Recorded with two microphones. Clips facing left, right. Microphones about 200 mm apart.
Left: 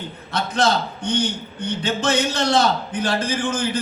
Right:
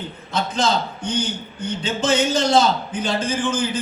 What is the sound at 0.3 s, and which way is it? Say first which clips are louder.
A man's voice: left 1 dB; 65° left (ahead or behind).